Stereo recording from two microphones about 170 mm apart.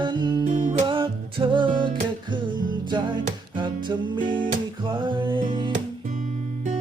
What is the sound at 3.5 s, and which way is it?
Music, 30° right (ahead or behind).